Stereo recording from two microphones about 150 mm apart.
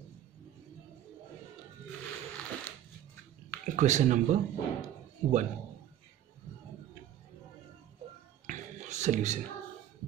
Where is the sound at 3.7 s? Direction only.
55° right (ahead or behind).